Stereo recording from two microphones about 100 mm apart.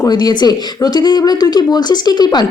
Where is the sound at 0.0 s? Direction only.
40° left (ahead or behind).